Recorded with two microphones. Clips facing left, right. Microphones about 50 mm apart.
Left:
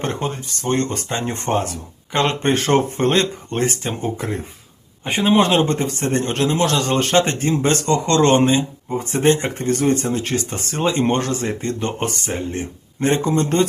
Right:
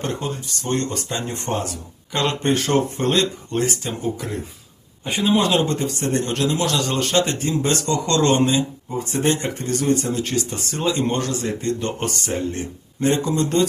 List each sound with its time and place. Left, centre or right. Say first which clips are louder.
0.0 s speech: left 2 dB; left